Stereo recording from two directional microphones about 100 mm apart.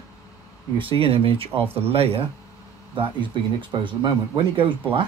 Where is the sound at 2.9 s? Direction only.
55° right (ahead or behind).